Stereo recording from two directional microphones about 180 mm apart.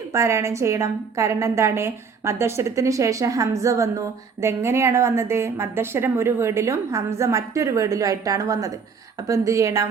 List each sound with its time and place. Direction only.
0.1 s a woman's voice: 15° right (ahead or behind)